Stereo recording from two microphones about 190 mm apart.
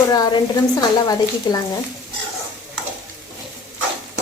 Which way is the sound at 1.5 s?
20° left (ahead or behind).